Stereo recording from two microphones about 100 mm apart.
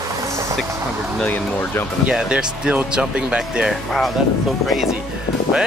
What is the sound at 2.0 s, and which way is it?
Speech, 10° right (ahead or behind).